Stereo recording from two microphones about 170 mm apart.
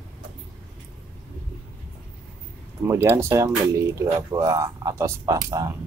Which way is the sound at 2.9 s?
15° right (ahead or behind).